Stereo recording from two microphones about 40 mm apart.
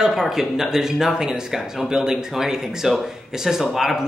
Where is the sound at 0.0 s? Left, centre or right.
Centre.